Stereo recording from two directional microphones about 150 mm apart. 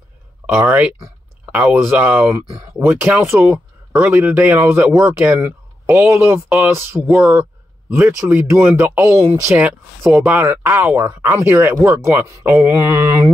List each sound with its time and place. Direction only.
0.5 s speech: 10° right (ahead or behind)